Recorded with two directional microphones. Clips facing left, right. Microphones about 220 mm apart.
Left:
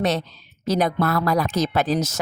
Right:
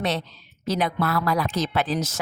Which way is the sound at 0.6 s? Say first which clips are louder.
Left 4 dB; 40° left (ahead or behind).